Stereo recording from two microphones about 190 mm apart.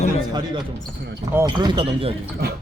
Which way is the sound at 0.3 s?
20° right (ahead or behind).